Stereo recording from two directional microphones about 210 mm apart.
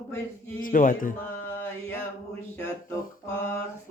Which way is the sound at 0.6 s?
40° left (ahead or behind).